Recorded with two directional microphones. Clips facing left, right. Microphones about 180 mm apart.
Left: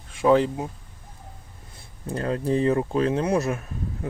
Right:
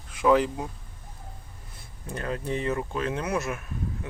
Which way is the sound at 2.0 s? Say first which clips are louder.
Left 6 dB; 35° left (ahead or behind).